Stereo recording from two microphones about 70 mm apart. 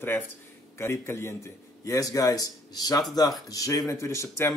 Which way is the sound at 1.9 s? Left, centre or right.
Left.